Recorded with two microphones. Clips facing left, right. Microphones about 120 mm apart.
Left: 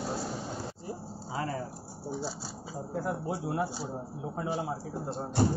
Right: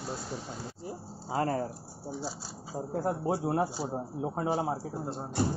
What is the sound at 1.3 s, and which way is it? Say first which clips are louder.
Speech: right 5 dB; 45° right (ahead or behind).